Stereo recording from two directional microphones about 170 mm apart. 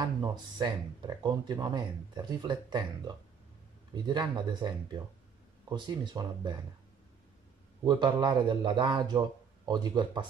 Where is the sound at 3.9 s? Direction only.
25° right (ahead or behind).